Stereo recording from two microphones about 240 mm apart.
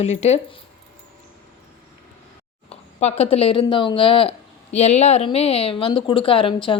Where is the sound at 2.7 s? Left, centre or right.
Left.